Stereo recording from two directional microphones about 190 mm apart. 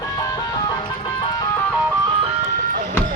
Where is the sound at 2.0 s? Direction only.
30° right (ahead or behind).